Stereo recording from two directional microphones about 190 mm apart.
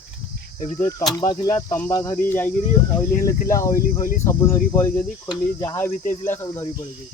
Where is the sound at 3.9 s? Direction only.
45° left (ahead or behind).